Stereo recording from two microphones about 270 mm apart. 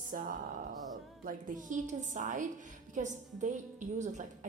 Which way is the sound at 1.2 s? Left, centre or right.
Right.